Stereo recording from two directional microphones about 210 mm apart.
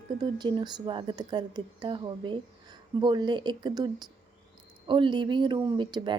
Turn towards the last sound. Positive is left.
turn(degrees=-20)  # may be behind; listen again after turning